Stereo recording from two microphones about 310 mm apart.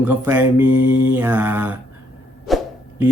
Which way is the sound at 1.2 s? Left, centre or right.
Centre.